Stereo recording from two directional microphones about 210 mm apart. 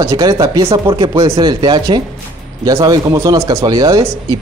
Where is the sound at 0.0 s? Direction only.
15° right (ahead or behind).